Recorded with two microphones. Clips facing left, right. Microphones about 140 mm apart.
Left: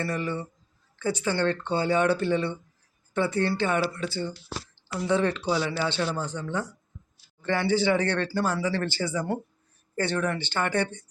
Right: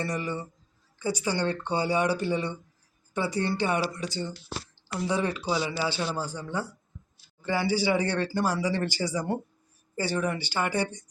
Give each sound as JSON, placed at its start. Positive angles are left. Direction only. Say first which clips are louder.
{"t": 0.0, "sound": "speech", "louder": "left 2 dB", "side_deg": -15}